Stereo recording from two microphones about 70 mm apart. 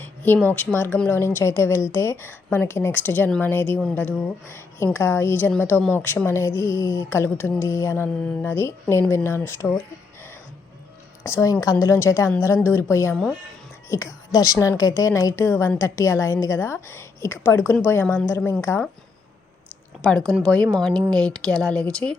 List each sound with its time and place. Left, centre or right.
0.0 s a sound: left
0.4 s a woman's voice: left
11.2 s a woman's voice: left
13.9 s a woman's voice: left
15.4 s a woman's voice: left
20.0 s speech: centre